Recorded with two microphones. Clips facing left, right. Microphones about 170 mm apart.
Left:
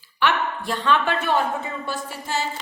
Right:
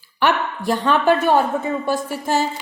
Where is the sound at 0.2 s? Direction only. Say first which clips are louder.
Right 3 dB; 40° right (ahead or behind).